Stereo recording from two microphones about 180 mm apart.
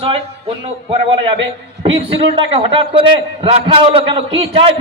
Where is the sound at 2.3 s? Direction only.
30° right (ahead or behind).